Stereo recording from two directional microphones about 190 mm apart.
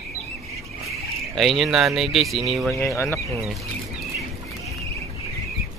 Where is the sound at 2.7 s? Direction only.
15° left (ahead or behind).